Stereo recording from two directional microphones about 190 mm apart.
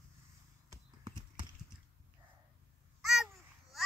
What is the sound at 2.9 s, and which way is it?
Babbling, centre (ahead or behind).